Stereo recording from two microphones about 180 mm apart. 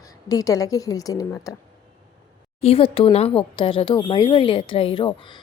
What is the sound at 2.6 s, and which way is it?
A woman's voice, 35° left (ahead or behind).